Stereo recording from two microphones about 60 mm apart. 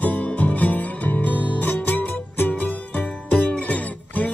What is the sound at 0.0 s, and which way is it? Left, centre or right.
Music, left.